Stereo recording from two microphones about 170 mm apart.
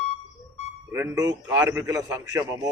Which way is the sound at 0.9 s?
20° right (ahead or behind).